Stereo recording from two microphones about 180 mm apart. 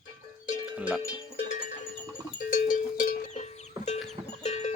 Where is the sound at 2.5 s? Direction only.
50° left (ahead or behind).